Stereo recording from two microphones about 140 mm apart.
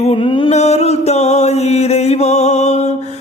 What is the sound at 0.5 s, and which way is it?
Mantra, 50° left (ahead or behind).